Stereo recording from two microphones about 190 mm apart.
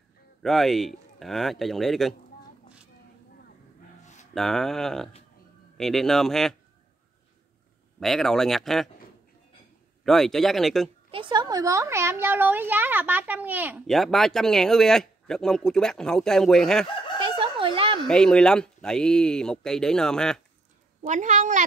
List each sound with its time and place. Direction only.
0.4 s speech: centre (ahead or behind)
4.3 s speech: centre (ahead or behind)
8.0 s speech: centre (ahead or behind)
10.0 s speech: centre (ahead or behind)
11.1 s speech: 25° right (ahead or behind); by 13.8 s 10° right (ahead or behind)
13.8 s speech: centre (ahead or behind)
17.2 s a sound: 25° right (ahead or behind)
18.0 s speech: 5° left (ahead or behind)
21.0 s a woman's voice: 40° right (ahead or behind)